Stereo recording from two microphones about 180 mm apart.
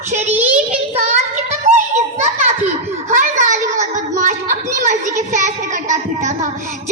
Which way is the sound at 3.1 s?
40° right (ahead or behind).